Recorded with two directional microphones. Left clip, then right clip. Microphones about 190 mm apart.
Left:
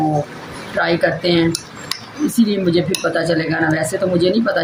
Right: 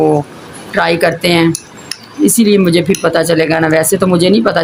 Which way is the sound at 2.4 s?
60° right (ahead or behind).